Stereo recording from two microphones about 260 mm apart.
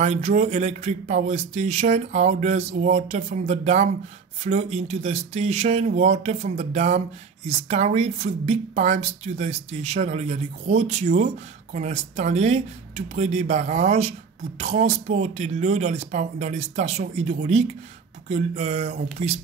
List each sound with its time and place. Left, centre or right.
0.0 s speech: right